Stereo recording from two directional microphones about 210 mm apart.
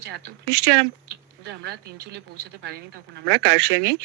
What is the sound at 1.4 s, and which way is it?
Speech, 50° right (ahead or behind).